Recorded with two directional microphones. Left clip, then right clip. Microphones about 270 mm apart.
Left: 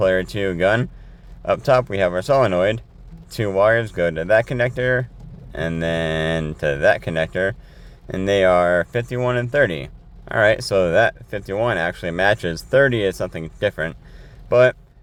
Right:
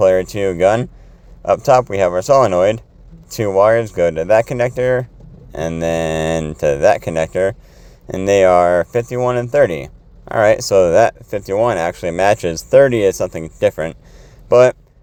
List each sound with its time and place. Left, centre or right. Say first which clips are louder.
0.0 s speech: right 6 dB; centre